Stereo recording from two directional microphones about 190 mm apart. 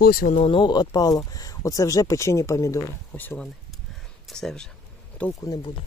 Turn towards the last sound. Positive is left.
turn(degrees=20)  # may be behind; listen again after turning